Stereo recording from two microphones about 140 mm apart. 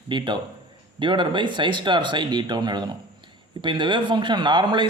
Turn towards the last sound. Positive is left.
turn(degrees=-35)  # may be behind; listen again after turning